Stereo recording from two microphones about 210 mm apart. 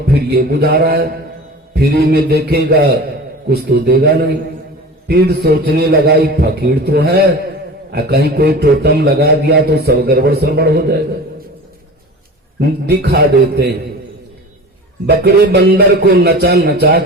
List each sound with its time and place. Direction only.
0.1 s a man's voice: 50° right (ahead or behind)
12.5 s a man's voice: 50° right (ahead or behind)
15.0 s a man's voice: 50° right (ahead or behind)